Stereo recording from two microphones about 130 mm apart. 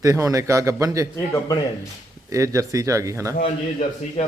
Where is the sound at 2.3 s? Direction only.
25° right (ahead or behind).